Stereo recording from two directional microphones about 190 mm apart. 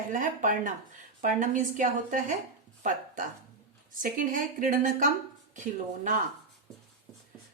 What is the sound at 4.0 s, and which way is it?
Speech, 45° right (ahead or behind).